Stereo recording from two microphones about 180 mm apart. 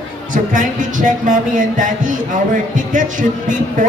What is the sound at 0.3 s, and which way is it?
Speech, 45° right (ahead or behind).